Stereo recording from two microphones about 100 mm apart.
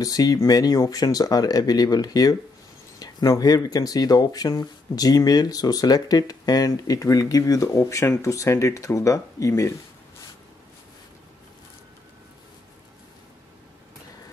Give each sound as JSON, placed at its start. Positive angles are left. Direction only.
{"t": 0.0, "sound": "speech", "side_deg": 40}